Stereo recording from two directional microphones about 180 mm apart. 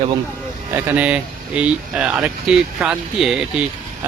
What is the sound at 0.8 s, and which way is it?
Speech, 10° right (ahead or behind).